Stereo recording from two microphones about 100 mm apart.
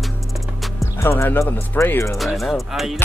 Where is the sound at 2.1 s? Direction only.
Centre (ahead or behind).